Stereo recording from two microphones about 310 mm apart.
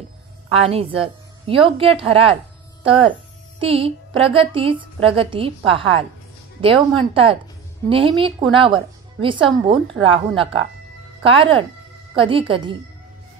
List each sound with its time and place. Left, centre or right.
0.5 s speech: centre